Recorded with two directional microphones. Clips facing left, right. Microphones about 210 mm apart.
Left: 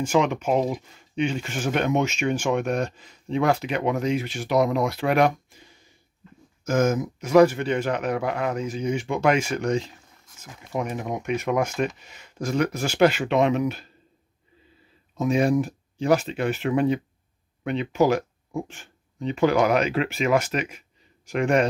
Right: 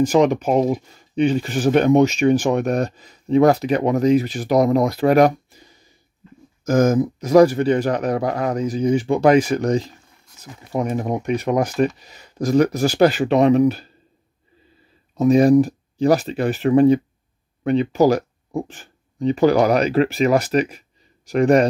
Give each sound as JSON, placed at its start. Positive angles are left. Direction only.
{"t": 0.0, "sound": "speech", "side_deg": -35}
{"t": 15.1, "sound": "speech", "side_deg": -40}